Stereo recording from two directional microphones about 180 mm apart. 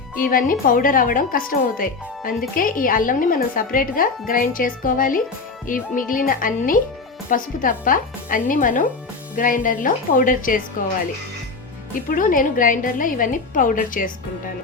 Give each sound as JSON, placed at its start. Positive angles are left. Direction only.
{"t": 0.3, "sound": "speech", "side_deg": 50}
{"t": 12.0, "sound": "speech", "side_deg": 50}